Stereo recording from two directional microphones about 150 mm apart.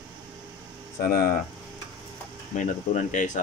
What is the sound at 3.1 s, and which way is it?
Speech, 55° left (ahead or behind).